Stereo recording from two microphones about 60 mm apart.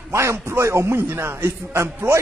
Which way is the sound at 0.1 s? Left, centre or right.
Right.